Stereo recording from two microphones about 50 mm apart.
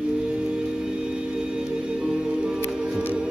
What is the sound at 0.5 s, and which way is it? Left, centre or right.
Music, centre.